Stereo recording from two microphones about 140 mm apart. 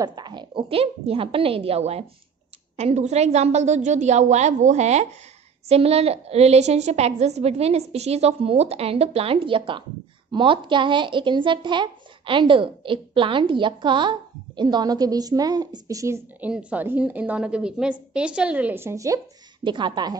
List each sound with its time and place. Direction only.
0.0 s a woman's voice: 30° right (ahead or behind)
16.3 s a woman's voice: 10° right (ahead or behind); by 20.2 s 30° right (ahead or behind)